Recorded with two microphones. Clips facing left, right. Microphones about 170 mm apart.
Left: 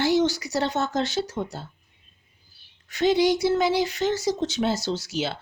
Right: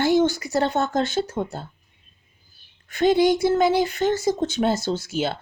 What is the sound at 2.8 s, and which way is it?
Speech, 50° right (ahead or behind).